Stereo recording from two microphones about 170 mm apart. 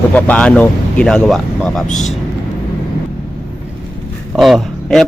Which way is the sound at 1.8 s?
45° left (ahead or behind).